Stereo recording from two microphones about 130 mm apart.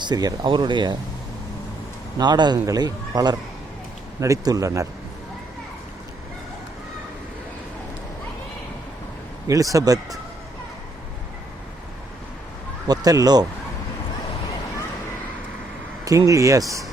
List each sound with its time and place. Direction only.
0.0 s a man's voice: 30° right (ahead or behind)
2.1 s a man's voice: 35° right (ahead or behind)
9.5 s speech: 25° right (ahead or behind)
12.9 s a man's voice: 30° right (ahead or behind)
16.0 s speech: 25° right (ahead or behind)